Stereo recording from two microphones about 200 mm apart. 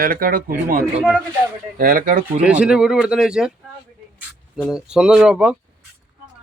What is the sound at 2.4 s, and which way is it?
Speech, 5° right (ahead or behind).